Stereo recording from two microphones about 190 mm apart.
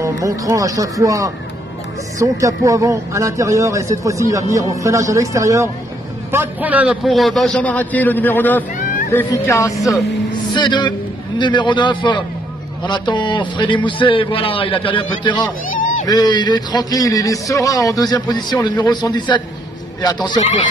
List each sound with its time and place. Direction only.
0.0 s a man's voice: 15° right (ahead or behind); by 15.5 s 25° left (ahead or behind)
15.7 s a sound: 45° left (ahead or behind)
16.1 s a man's voice: 20° left (ahead or behind)
20.3 s speech: 35° left (ahead or behind)